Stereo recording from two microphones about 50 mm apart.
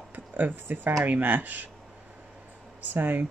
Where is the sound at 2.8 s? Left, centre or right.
Right.